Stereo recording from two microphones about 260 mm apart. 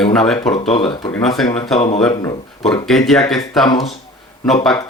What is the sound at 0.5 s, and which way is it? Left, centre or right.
Speech, left.